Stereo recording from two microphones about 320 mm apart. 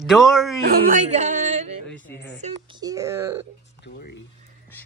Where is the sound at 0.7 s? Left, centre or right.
Right.